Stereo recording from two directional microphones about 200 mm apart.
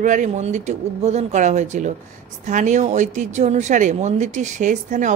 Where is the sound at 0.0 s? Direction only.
40° right (ahead or behind).